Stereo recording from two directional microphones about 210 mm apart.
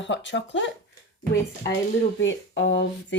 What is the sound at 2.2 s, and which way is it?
Speech, 60° left (ahead or behind).